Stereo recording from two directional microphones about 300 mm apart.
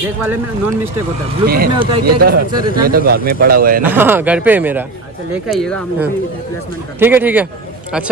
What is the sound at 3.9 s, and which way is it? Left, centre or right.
A man's voice, centre.